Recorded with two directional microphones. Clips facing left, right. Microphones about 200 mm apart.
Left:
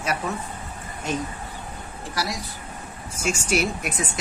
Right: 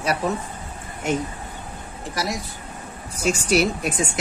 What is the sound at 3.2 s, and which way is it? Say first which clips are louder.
Speech: right 4 dB; 40° right (ahead or behind).